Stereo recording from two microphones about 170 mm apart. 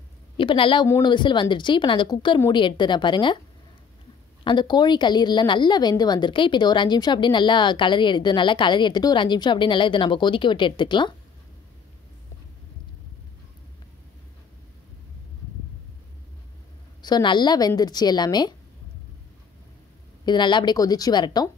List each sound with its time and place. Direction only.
0.4 s a woman's voice: 30° left (ahead or behind)
4.5 s a woman's voice: 25° left (ahead or behind)
17.0 s a woman's voice: 25° left (ahead or behind)
20.2 s a woman's voice: 25° left (ahead or behind)